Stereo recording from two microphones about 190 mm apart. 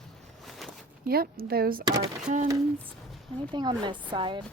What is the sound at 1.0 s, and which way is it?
Speech, 50° right (ahead or behind).